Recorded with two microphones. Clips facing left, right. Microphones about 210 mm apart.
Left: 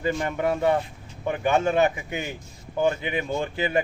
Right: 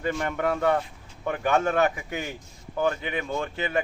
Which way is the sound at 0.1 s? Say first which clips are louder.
Left 1 dB; 15° left (ahead or behind).